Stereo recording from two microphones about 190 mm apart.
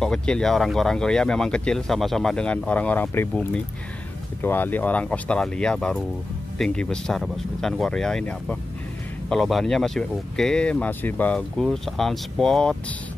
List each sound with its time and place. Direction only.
0.0 s speech: 5° left (ahead or behind)